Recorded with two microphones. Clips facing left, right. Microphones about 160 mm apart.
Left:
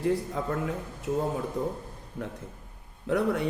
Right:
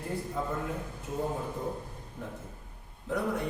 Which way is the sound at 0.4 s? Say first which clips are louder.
Left 2 dB; 85° left.